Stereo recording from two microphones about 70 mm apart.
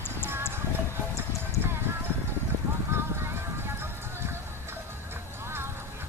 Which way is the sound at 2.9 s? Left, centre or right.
Right.